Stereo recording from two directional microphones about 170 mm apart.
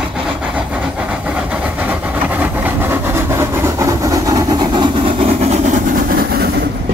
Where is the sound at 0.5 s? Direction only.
5° right (ahead or behind); by 6.5 s 65° right (ahead or behind).